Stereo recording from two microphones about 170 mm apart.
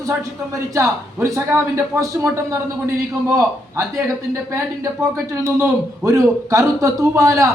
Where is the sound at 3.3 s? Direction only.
15° right (ahead or behind).